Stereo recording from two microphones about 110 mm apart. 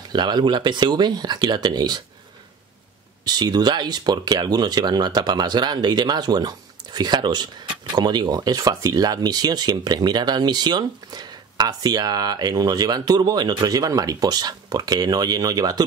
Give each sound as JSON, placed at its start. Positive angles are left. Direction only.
{"t": 0.1, "sound": "speech", "side_deg": -40}
{"t": 3.3, "sound": "speech", "side_deg": -40}